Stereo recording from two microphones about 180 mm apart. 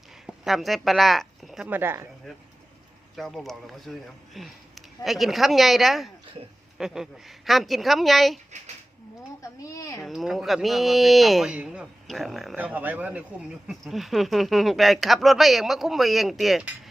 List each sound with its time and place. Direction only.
0.4 s speech: centre (ahead or behind)
3.2 s speech: centre (ahead or behind)
9.4 s speech: 20° left (ahead or behind)
10.0 s speech: centre (ahead or behind)